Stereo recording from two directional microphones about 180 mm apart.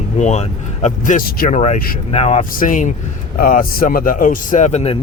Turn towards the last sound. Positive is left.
turn(degrees=35)  # may be behind; listen again after turning